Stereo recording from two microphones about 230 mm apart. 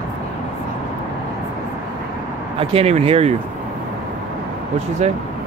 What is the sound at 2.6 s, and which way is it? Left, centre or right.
Speech, right.